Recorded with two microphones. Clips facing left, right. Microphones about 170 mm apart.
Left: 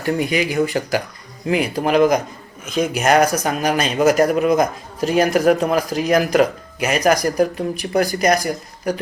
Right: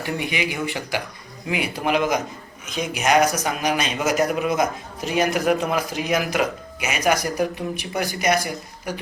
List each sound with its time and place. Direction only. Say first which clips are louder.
0.0 s a man's voice: left 6 dB; 40° left (ahead or behind)